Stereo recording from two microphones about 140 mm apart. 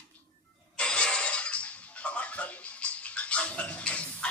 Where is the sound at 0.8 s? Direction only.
5° left (ahead or behind).